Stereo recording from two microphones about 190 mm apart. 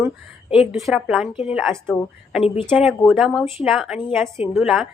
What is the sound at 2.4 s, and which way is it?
Speech, 30° left (ahead or behind).